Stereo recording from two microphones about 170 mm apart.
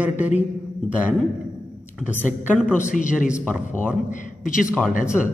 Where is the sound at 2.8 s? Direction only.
50° left (ahead or behind).